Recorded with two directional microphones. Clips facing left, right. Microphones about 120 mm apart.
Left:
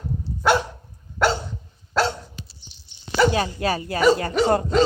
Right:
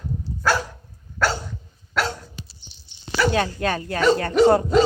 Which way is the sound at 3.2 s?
25° left (ahead or behind).